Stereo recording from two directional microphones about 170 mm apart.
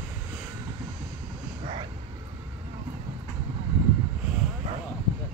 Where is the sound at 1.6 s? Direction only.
30° right (ahead or behind).